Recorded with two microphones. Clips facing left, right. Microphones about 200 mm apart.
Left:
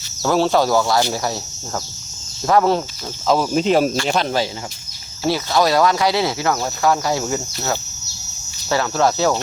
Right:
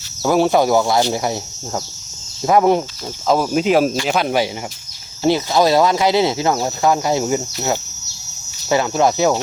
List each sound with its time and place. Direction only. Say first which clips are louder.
0.2 s speech: right 2 dB; 10° right (ahead or behind)
5.2 s speech: right 3 dB; 20° right (ahead or behind)
8.7 s speech: right 2 dB; 20° right (ahead or behind)